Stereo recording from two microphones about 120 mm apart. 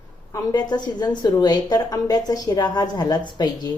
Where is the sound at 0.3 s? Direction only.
30° left (ahead or behind).